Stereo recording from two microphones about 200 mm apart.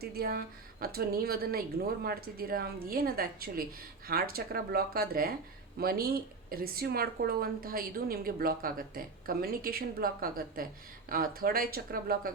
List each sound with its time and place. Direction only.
0.0 s a woman's voice: 50° right (ahead or behind)